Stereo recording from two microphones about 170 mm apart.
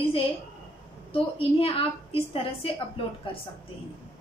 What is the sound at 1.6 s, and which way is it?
A woman's voice, 35° left (ahead or behind).